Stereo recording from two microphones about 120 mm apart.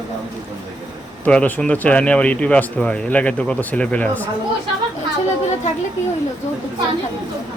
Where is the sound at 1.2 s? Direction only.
10° left (ahead or behind).